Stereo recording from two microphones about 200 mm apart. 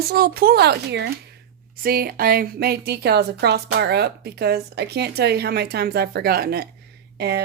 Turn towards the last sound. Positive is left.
turn(degrees=-55)  # may be behind; listen again after turning